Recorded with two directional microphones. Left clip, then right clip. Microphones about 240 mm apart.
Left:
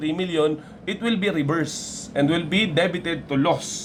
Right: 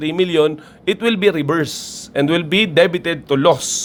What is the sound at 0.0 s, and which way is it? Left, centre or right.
Speech, right.